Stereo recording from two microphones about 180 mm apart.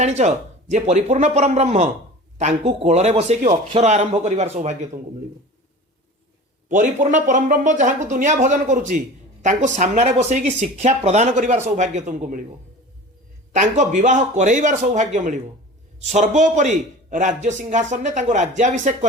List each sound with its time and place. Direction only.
0.0 s speech: 40° right (ahead or behind)
6.7 s a man's voice: 45° right (ahead or behind)
13.5 s a man's voice: 45° right (ahead or behind)